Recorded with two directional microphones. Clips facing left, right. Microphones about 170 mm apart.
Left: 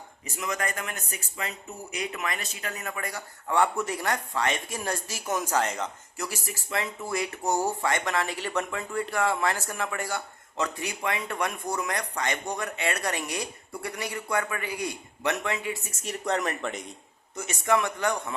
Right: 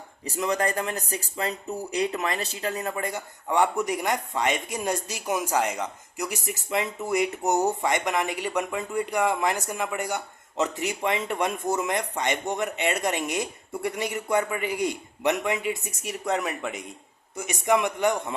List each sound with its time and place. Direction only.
0.3 s speech: 35° right (ahead or behind)
3.5 s a man's voice: 15° right (ahead or behind)